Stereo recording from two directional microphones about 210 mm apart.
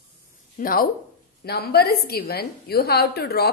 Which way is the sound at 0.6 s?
45° left (ahead or behind).